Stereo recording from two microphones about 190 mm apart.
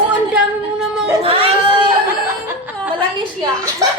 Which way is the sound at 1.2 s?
30° right (ahead or behind).